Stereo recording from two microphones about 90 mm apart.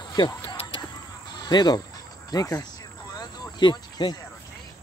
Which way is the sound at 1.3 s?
50° left (ahead or behind).